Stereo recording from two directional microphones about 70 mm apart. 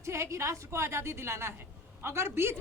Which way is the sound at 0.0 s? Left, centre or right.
Right.